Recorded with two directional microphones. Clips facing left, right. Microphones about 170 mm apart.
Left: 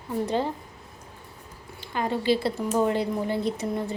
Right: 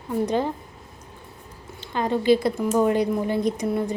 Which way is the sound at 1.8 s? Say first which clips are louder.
Right 4 dB; 20° right (ahead or behind).